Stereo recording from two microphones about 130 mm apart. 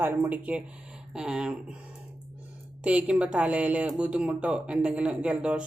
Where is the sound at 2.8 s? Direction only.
10° right (ahead or behind).